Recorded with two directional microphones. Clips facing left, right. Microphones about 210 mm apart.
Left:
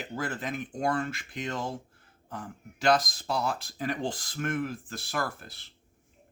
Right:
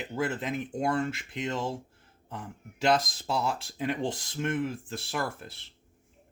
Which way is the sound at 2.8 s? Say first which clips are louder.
Left 1 dB; 25° right (ahead or behind).